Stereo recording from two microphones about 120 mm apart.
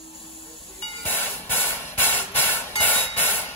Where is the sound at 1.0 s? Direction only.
15° left (ahead or behind).